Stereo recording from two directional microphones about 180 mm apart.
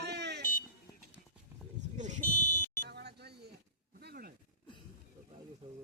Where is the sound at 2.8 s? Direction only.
65° right (ahead or behind).